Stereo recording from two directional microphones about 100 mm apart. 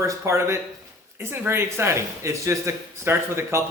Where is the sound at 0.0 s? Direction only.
30° right (ahead or behind).